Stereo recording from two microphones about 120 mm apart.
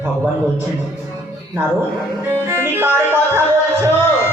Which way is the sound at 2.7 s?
20° right (ahead or behind).